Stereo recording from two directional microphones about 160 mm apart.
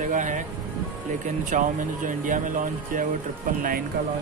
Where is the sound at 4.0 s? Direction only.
75° right (ahead or behind).